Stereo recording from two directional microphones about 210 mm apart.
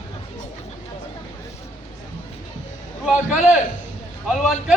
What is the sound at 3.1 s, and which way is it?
Speech, 5° right (ahead or behind).